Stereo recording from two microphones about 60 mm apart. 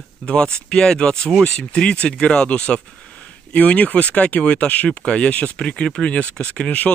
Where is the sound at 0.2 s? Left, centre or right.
Centre.